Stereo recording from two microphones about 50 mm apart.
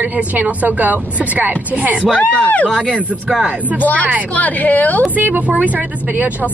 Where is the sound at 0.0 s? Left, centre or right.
Right.